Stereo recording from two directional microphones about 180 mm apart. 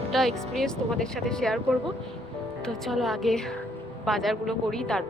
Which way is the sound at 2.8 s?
Centre (ahead or behind).